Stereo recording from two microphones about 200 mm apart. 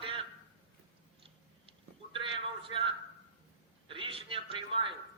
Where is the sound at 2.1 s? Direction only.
25° right (ahead or behind).